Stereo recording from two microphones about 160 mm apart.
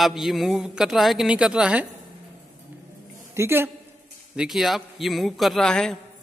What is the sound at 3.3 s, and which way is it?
Speech, 15° right (ahead or behind).